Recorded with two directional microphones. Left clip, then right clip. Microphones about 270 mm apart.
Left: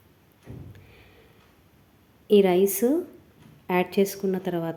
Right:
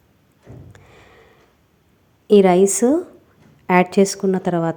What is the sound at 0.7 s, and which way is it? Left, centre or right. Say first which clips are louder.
Sniff: right 6 dB; centre.